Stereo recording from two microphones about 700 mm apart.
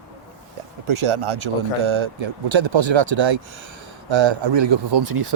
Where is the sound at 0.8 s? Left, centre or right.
Right.